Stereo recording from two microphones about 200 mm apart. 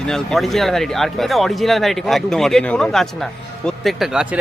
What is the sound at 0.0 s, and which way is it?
Speech, 5° left (ahead or behind).